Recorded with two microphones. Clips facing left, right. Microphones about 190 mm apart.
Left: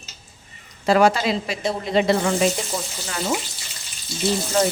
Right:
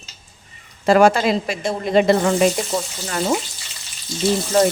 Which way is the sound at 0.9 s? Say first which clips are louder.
Right 3 dB; 50° right (ahead or behind).